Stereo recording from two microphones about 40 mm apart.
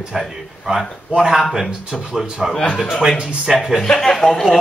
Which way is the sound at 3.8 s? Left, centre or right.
Centre.